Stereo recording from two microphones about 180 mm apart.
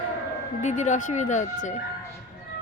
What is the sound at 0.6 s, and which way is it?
A woman's voice, 40° left (ahead or behind).